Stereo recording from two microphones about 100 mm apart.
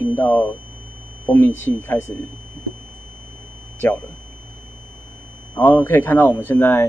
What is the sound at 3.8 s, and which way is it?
Speech, 20° left (ahead or behind).